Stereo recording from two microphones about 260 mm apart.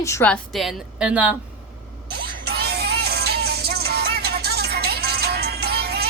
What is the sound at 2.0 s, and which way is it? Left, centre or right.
Music, right.